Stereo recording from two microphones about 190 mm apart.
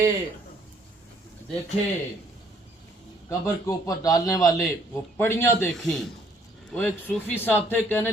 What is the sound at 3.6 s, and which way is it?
Speech, 20° left (ahead or behind).